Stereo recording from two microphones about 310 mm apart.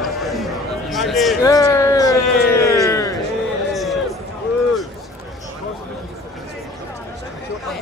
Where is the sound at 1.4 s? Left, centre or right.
Centre.